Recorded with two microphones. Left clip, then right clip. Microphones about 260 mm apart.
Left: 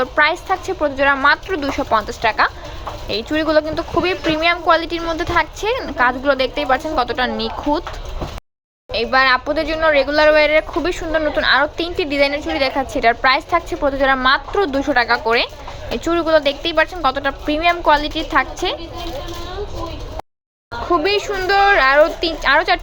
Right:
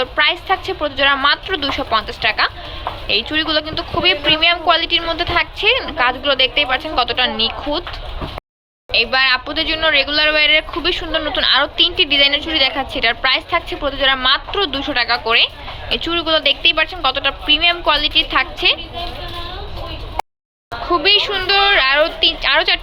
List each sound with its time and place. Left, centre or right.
0.0 s speech: centre
9.0 s speech: centre
21.2 s speech: centre